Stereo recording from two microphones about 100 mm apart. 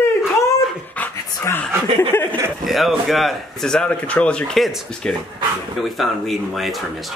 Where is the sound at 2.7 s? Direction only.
Centre (ahead or behind).